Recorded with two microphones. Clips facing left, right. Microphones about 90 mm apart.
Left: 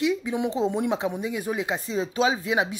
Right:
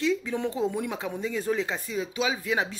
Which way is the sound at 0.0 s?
15° left (ahead or behind).